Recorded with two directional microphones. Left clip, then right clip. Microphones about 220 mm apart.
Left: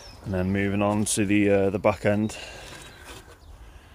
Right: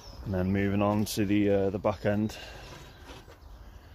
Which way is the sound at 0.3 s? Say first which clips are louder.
Left 3 dB; 15° left (ahead or behind).